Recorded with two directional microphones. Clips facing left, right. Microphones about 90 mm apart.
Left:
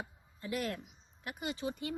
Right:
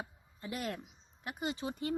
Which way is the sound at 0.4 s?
20° right (ahead or behind).